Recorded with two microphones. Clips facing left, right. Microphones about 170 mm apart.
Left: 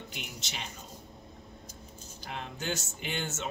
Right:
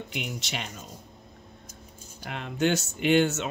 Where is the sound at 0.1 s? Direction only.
70° right (ahead or behind).